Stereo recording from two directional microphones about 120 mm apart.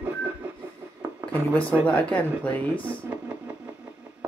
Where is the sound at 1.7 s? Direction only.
10° left (ahead or behind).